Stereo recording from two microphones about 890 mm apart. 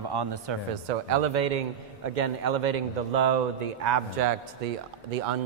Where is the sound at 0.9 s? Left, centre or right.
Right.